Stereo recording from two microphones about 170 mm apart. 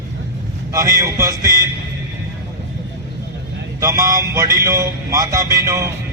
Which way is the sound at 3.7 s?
20° right (ahead or behind).